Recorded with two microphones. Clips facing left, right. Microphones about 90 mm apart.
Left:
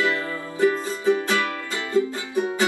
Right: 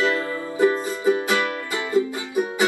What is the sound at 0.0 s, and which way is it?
Music, 20° right (ahead or behind).